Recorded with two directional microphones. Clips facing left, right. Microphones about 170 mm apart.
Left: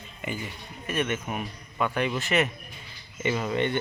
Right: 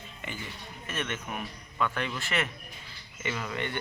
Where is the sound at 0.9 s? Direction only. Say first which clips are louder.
Left 7 dB; 15° left (ahead or behind).